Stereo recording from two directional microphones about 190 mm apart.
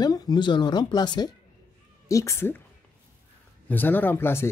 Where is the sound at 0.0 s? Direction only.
20° left (ahead or behind).